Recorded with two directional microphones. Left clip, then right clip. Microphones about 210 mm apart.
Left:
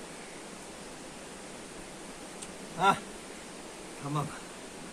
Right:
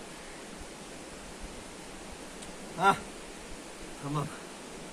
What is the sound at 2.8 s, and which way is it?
Speech, centre (ahead or behind).